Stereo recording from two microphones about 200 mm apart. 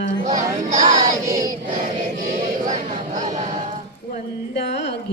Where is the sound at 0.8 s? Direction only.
15° right (ahead or behind).